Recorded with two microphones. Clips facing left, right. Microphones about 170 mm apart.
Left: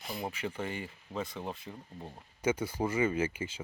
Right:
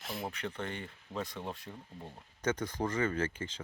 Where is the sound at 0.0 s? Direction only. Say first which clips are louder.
Left 2 dB; centre (ahead or behind).